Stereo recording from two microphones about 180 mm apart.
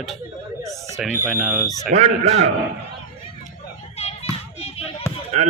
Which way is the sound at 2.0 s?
35° right (ahead or behind).